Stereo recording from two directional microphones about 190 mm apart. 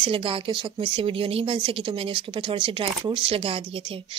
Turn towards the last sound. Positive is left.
turn(degrees=-30)  # may be behind; listen again after turning